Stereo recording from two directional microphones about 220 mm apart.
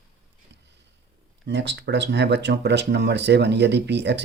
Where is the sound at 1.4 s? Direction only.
50° right (ahead or behind).